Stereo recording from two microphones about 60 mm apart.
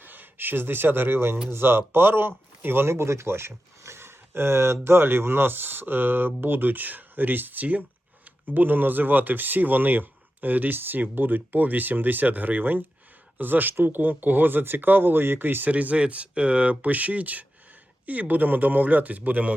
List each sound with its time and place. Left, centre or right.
0.0 s speech: right